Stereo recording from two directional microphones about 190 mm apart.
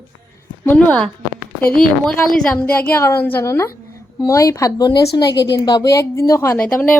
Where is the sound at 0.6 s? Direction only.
10° left (ahead or behind).